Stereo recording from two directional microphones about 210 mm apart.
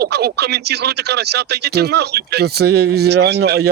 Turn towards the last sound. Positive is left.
turn(degrees=-50)  # may be behind; listen again after turning